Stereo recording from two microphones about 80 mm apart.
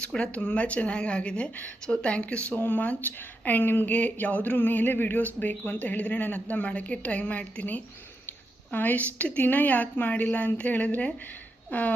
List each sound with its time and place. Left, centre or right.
0.0 s a woman's voice: centre